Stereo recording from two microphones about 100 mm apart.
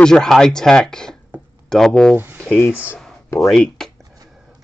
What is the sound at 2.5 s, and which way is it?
Speech, 20° left (ahead or behind).